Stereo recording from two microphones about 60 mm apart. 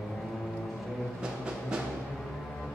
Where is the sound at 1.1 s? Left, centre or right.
Centre.